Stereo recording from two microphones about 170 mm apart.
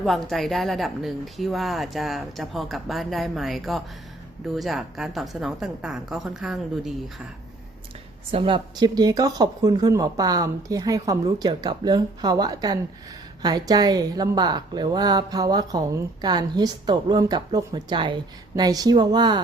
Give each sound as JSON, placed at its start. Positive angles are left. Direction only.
{"t": 0.0, "sound": "speech", "side_deg": 0}
{"t": 8.3, "sound": "a woman's voice", "side_deg": -30}